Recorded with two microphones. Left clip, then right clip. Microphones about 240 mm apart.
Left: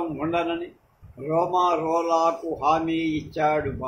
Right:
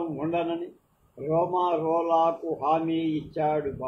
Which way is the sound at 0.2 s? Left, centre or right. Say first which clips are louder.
Left 3 dB; left.